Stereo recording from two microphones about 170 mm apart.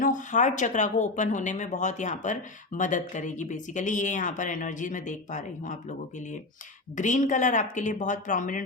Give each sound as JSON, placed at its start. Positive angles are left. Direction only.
{"t": 0.0, "sound": "speech", "side_deg": 50}
{"t": 6.9, "sound": "speech", "side_deg": 45}